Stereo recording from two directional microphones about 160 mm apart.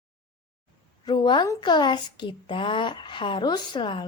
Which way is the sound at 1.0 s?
25° left (ahead or behind).